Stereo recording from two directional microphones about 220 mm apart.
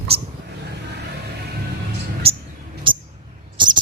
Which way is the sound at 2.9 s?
20° right (ahead or behind).